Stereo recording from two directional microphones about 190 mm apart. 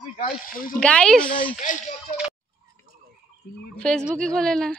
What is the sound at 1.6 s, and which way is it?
Speech, 40° left (ahead or behind).